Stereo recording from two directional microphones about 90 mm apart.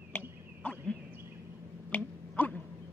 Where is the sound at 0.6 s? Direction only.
15° left (ahead or behind).